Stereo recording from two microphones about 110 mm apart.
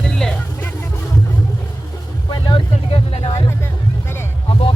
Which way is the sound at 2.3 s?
45° left (ahead or behind).